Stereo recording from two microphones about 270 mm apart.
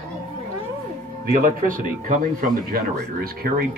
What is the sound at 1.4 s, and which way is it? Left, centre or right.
Speech, right.